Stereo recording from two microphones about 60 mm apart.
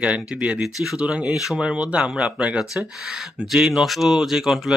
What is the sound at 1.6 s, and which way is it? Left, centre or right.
Speech, centre.